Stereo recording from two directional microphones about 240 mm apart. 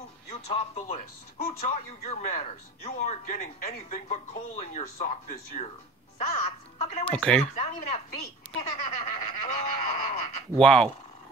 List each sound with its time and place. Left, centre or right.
0.3 s speech: left
7.1 s speech: centre
7.5 s speech: left
10.6 s speech: centre